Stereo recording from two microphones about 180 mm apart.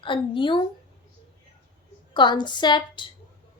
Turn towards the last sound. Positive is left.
turn(degrees=25)  # may be behind; listen again after turning